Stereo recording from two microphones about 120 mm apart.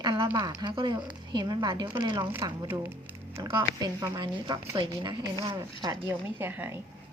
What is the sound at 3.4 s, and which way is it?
Speech, 35° right (ahead or behind).